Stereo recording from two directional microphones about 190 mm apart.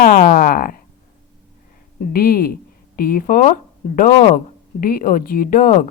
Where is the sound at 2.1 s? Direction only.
50° left (ahead or behind).